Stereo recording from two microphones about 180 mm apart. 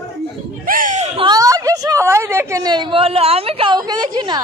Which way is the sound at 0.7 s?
45° right (ahead or behind).